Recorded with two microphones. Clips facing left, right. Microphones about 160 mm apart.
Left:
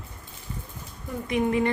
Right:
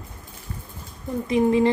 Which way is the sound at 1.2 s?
30° right (ahead or behind).